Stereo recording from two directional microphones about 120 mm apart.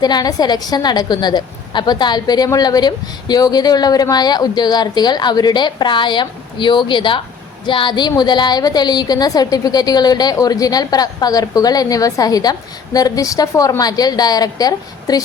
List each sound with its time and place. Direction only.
0.0 s a woman's voice: 35° left (ahead or behind)